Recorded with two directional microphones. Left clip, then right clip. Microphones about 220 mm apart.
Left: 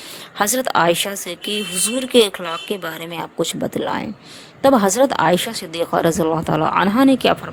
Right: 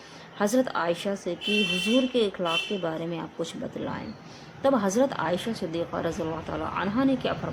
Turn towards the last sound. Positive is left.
turn(degrees=45)  # may be behind; listen again after turning